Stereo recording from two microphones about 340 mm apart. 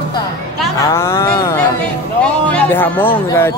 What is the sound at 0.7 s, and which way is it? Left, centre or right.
Speech, centre.